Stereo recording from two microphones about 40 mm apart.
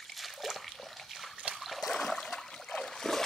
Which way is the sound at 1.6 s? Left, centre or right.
Centre.